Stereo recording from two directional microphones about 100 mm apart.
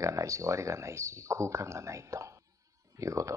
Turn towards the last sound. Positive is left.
turn(degrees=-30)  # may be behind; listen again after turning